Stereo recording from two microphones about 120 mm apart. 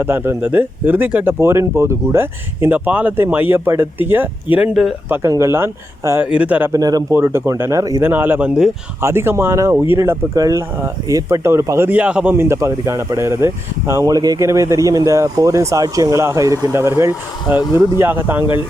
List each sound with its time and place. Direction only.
0.0 s speech: 20° right (ahead or behind)
5.0 s speech: 15° right (ahead or behind)
6.7 s speech: 30° right (ahead or behind)
8.0 s speech: 20° right (ahead or behind)
9.0 s speech: 20° right (ahead or behind)